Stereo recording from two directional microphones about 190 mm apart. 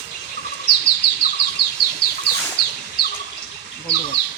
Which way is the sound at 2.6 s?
60° left (ahead or behind).